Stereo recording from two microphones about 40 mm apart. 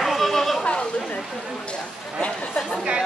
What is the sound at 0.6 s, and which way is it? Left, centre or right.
Chatter, left.